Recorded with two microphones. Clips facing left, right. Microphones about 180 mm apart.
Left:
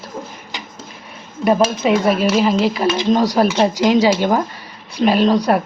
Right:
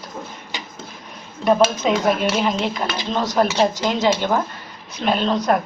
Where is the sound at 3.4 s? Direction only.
10° left (ahead or behind).